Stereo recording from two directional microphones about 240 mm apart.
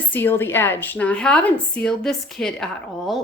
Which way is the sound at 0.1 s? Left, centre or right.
Centre.